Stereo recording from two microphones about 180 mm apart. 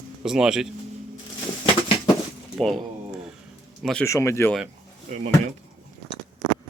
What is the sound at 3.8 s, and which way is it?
Speech, 5° left (ahead or behind).